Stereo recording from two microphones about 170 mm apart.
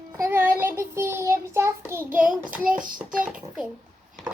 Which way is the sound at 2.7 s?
55° right (ahead or behind).